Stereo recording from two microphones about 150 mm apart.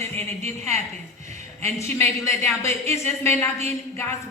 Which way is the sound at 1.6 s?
20° left (ahead or behind).